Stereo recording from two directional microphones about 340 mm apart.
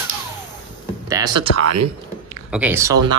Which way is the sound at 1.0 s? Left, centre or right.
Centre.